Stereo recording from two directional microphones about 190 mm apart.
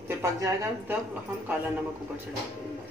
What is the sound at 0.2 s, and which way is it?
Speech, 15° right (ahead or behind).